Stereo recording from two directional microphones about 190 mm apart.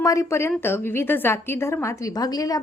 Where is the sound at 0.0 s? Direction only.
15° left (ahead or behind).